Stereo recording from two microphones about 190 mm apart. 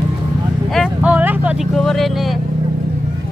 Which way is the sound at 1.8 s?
Centre (ahead or behind).